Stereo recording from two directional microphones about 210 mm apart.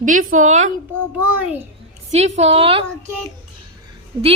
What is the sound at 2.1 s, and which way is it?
Speech, 35° right (ahead or behind).